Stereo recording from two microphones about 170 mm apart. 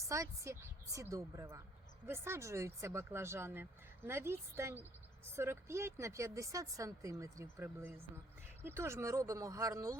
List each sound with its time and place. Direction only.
0.1 s speech: 15° right (ahead or behind)